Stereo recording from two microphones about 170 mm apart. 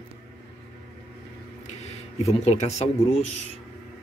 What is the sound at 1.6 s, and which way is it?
Speech, 40° left (ahead or behind).